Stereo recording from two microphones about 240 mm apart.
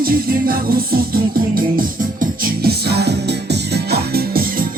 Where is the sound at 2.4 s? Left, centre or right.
Right.